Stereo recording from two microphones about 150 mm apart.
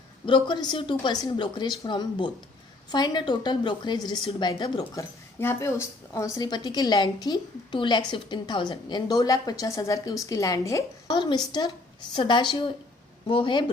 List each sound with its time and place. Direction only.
0.3 s a woman's voice: 30° left (ahead or behind)
5.4 s a woman's voice: 15° left (ahead or behind)